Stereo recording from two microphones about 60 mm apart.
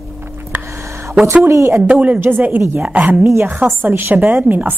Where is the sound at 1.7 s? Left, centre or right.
Right.